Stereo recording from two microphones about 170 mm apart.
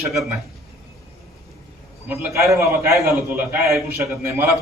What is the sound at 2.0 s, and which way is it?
A man's voice, 15° right (ahead or behind).